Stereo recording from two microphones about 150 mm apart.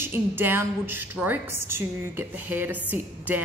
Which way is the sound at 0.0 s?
15° right (ahead or behind).